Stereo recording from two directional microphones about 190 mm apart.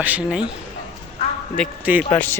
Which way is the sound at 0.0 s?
5° right (ahead or behind).